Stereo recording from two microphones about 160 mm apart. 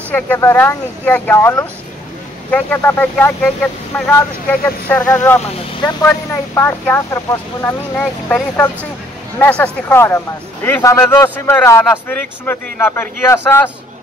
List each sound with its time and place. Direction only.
0.1 s speech: 15° left (ahead or behind)
5.8 s speech: 25° left (ahead or behind)
6.0 s speech: 15° left (ahead or behind)